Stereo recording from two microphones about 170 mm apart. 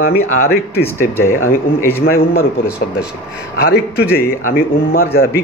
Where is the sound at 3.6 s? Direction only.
75° left (ahead or behind).